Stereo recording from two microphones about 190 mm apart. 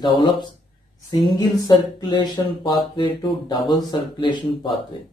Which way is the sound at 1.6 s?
25° left (ahead or behind).